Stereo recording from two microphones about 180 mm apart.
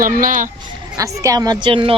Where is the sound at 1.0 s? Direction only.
20° right (ahead or behind).